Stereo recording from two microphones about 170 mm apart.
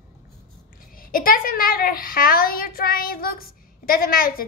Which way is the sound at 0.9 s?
55° left (ahead or behind).